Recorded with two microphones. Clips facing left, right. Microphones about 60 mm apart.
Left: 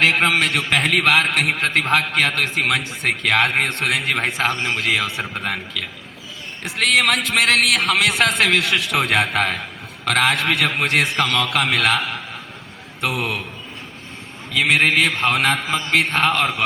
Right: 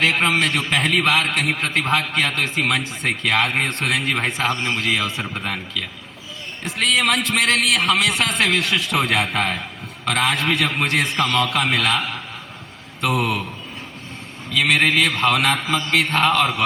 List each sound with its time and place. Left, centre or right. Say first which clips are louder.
0.0 s a man's voice: left 1 dB; left
6.7 s a man's voice: left 1 dB; left
10.1 s a man's voice: left 2 dB; left
14.5 s a man's voice: left 1 dB; left